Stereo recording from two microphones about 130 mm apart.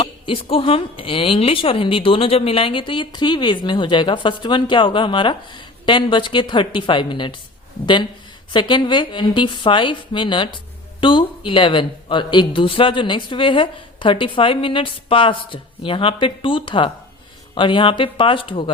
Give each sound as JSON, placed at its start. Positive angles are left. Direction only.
{"t": 0.0, "sound": "a woman's voice", "side_deg": 45}
{"t": 8.5, "sound": "a woman's voice", "side_deg": 35}